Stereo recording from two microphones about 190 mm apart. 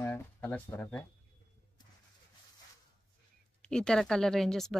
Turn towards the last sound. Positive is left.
turn(degrees=0)  # may be behind; listen again after turning